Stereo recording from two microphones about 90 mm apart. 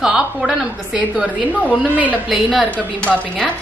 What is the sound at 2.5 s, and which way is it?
Speech, 10° left (ahead or behind).